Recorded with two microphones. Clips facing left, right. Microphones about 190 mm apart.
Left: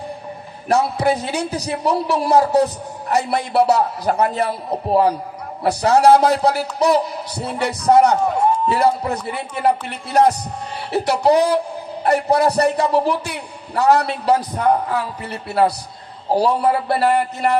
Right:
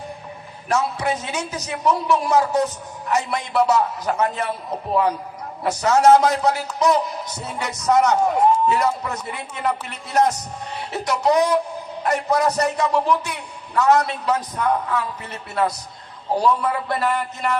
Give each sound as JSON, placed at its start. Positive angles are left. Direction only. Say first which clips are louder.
{"t": 0.7, "sound": "a man's voice", "louder": "left 5 dB", "side_deg": 35}